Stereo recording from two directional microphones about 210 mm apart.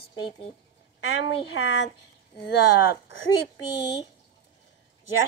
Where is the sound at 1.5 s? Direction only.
55° left (ahead or behind).